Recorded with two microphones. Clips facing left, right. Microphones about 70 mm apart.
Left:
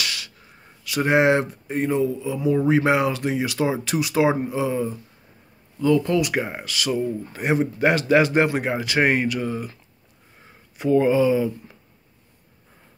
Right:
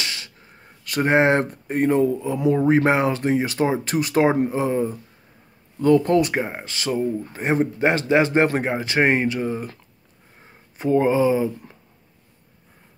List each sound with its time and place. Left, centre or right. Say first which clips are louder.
0.0 s a sound: left 1 dB; right
0.8 s speech: even; right
2.5 s speech: right 1 dB; right
6.3 s speech: even; right